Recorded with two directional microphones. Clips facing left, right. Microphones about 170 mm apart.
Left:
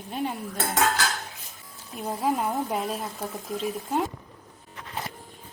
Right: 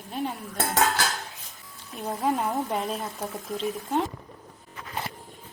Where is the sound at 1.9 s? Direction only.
Centre (ahead or behind).